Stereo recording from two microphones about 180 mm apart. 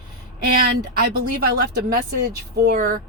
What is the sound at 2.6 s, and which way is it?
Speech, 55° right (ahead or behind).